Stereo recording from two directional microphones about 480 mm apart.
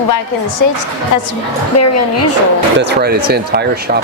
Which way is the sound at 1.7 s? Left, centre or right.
Left.